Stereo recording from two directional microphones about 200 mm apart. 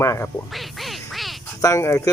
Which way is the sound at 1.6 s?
15° left (ahead or behind).